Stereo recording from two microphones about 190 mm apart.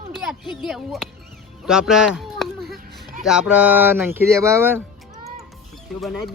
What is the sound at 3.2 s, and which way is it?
Speech, 5° right (ahead or behind).